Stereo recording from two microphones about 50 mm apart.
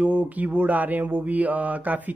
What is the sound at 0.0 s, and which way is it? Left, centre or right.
Speech, right.